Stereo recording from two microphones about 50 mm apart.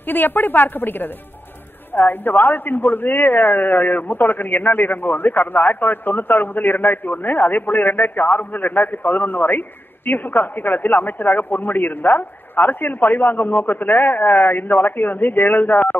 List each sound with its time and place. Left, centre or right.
0.1 s speech: left